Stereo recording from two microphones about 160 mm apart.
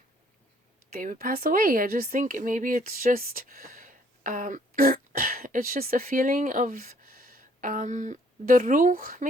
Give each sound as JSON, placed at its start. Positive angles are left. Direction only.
{"t": 0.9, "sound": "a woman's voice", "side_deg": -65}